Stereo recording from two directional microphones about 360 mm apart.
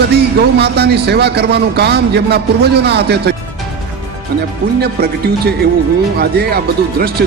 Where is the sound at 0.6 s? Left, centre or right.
Right.